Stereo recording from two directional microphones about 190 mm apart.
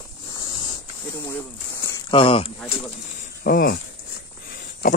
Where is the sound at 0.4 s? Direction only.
25° left (ahead or behind).